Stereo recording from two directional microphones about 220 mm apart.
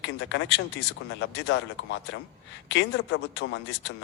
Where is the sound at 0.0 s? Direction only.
55° left (ahead or behind).